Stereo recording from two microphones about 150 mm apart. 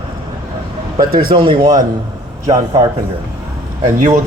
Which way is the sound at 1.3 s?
30° right (ahead or behind).